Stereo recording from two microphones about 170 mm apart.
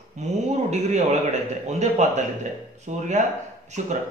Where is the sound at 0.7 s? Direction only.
40° right (ahead or behind).